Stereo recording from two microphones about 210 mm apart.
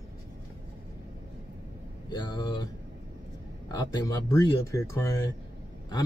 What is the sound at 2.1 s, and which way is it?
Speech, 20° left (ahead or behind).